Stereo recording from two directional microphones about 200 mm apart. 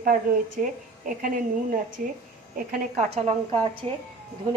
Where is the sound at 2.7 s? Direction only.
35° right (ahead or behind).